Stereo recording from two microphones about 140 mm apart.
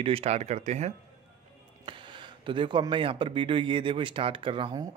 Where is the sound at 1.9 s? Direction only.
35° right (ahead or behind).